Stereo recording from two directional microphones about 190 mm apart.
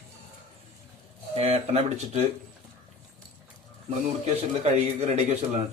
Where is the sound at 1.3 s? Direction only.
35° right (ahead or behind).